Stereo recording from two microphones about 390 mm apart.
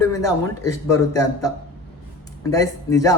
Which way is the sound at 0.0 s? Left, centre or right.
Centre.